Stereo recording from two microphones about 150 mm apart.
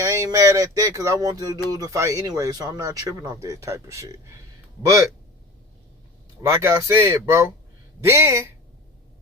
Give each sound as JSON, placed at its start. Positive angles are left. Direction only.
{"t": 0.0, "sound": "speech", "side_deg": -20}
{"t": 6.4, "sound": "speech", "side_deg": -20}